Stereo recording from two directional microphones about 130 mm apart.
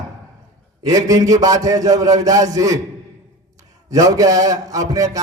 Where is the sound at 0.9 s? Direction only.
25° right (ahead or behind).